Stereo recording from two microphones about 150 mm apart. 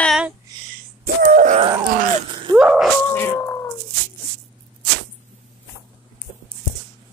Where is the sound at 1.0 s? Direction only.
65° right (ahead or behind).